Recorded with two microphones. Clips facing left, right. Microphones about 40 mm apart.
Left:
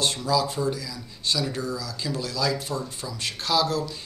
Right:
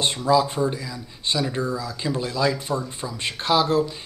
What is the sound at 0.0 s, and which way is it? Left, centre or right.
Speech, right.